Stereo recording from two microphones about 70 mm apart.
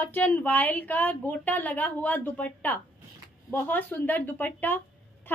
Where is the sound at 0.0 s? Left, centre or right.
Left.